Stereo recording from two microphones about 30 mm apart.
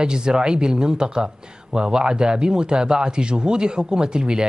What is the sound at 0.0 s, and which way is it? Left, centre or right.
Speech, right.